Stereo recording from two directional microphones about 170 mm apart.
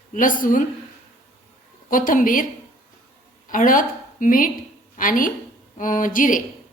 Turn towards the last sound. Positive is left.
turn(degrees=50)  # may be behind; listen again after turning